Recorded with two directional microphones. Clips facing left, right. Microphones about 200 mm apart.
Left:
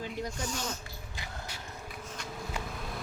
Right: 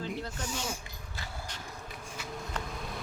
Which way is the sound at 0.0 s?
15° left (ahead or behind).